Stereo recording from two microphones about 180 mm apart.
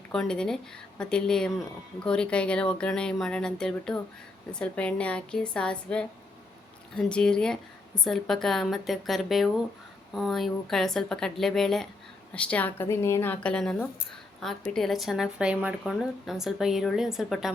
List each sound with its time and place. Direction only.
0.1 s a woman's voice: 5° left (ahead or behind)